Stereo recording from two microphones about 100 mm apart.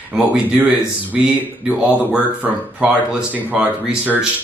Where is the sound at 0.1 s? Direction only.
10° right (ahead or behind).